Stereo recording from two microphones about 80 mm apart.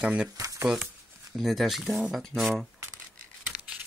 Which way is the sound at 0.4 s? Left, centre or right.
Right.